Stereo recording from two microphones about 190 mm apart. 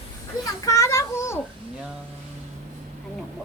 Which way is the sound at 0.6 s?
15° left (ahead or behind).